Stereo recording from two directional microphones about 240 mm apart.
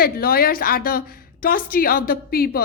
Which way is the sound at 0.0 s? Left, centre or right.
Left.